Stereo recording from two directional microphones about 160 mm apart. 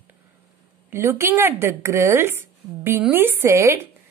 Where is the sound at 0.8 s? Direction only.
15° right (ahead or behind).